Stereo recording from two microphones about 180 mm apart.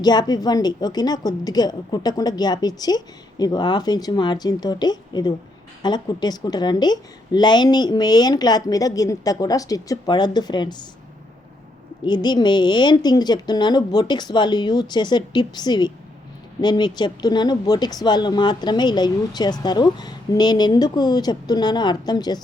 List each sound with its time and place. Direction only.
0.0 s speech: 25° left (ahead or behind)
12.0 s speech: 25° left (ahead or behind)